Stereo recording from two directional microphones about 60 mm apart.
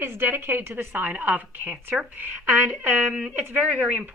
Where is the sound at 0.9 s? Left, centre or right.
Right.